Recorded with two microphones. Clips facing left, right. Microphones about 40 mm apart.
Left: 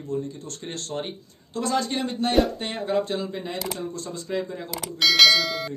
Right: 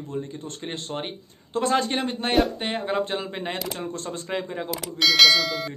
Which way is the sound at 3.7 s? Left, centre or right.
Right.